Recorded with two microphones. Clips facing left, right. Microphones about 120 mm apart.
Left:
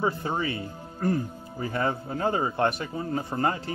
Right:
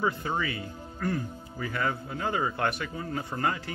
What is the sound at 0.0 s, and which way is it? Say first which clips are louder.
Speech: left 2 dB; 30° left (ahead or behind).